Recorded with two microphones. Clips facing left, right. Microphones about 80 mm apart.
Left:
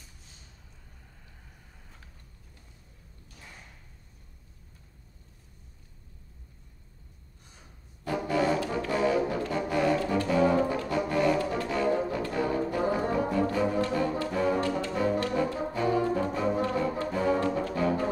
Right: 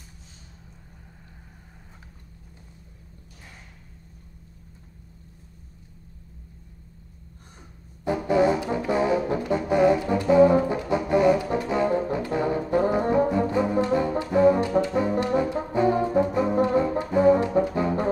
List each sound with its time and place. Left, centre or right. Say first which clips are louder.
8.0 s brass instrument: right 6 dB; right